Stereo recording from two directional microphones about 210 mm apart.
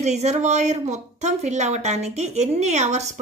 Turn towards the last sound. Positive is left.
turn(degrees=-30)  # may be behind; listen again after turning